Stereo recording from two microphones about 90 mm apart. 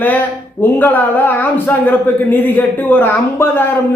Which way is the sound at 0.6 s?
20° left (ahead or behind).